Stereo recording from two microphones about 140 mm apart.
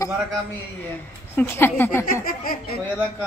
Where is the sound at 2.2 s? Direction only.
90° left.